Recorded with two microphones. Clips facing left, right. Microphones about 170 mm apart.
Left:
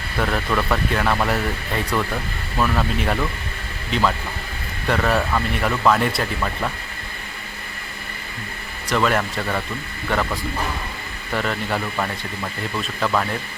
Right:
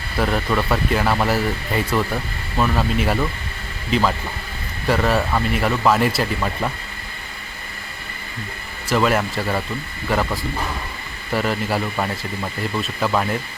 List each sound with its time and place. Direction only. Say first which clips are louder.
0.2 s speech: right 2 dB; 5° right (ahead or behind)
4.9 s speech: right 1 dB; 5° right (ahead or behind)
8.9 s speech: right 2 dB; 5° right (ahead or behind)